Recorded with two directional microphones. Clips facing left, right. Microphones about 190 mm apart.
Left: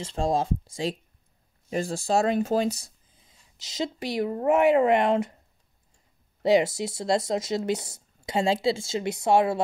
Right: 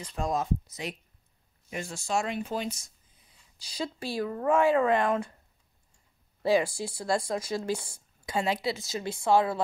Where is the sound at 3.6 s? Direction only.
20° left (ahead or behind).